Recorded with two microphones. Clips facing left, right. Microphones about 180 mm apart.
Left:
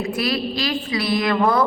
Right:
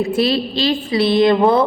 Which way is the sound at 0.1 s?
30° right (ahead or behind).